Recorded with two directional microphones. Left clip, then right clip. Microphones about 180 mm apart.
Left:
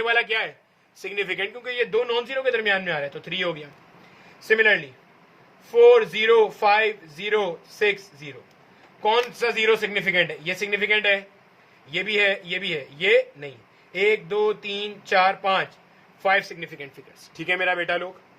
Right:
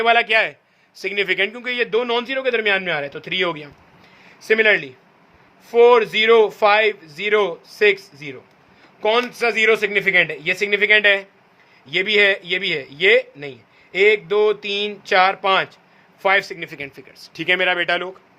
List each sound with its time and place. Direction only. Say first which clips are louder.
0.0 s a man's voice: right 7 dB; 65° right (ahead or behind)
0.9 s a man's voice: right 7 dB; 50° right (ahead or behind); by 16.9 s 65° right (ahead or behind)
17.2 s speech: right 6 dB; 45° right (ahead or behind)